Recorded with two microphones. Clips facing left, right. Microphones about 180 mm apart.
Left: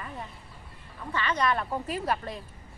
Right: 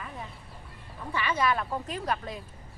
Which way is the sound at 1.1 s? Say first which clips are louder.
Even; 10° right (ahead or behind).